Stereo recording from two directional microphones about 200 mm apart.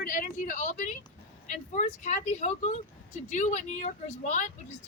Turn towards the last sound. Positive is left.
turn(degrees=35)  # may be behind; listen again after turning